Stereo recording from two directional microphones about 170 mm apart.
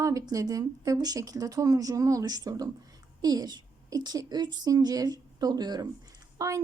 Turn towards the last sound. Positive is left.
turn(degrees=-20)  # may be behind; listen again after turning